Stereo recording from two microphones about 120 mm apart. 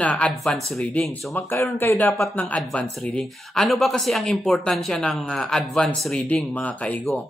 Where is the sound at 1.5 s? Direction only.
15° left (ahead or behind).